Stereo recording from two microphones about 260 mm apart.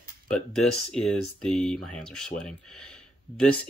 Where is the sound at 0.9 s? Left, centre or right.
Centre.